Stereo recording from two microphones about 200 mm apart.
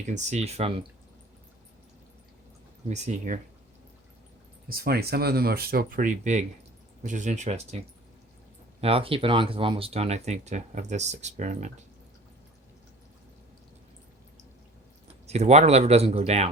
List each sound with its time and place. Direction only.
0.0 s speech: 35° right (ahead or behind)
2.9 s speech: 35° right (ahead or behind)
4.7 s speech: 50° right (ahead or behind); by 7.8 s 35° right (ahead or behind)
8.8 s speech: 25° right (ahead or behind)
15.0 s speech: 35° right (ahead or behind)